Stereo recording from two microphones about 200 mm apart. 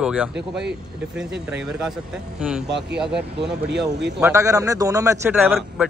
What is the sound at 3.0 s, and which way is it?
Speech, 5° right (ahead or behind).